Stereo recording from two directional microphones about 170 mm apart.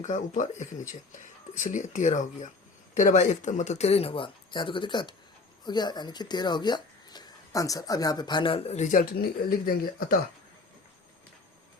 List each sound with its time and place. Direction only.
0.0 s speech: 45° left (ahead or behind)